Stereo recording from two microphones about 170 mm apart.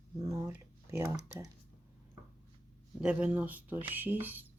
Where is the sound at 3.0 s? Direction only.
10° right (ahead or behind).